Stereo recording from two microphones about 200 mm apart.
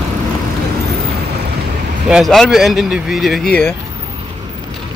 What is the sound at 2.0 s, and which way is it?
Speech, centre (ahead or behind).